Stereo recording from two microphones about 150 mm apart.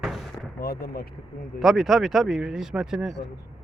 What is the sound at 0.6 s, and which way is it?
Speech, 90° left.